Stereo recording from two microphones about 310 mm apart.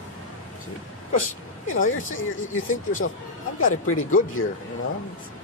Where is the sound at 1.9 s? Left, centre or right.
Left.